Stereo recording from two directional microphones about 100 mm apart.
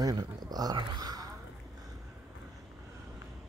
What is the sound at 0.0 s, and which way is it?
Speech, 40° right (ahead or behind).